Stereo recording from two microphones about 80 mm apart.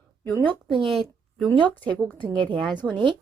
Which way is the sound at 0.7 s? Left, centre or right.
Centre.